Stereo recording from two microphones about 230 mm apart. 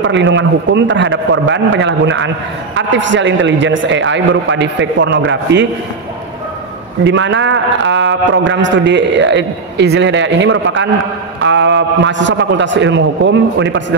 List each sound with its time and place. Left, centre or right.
0.0 s a man's voice: right
7.1 s a man's voice: right